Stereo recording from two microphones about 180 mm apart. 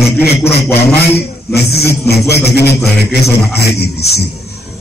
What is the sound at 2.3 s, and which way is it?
Music, 65° left (ahead or behind).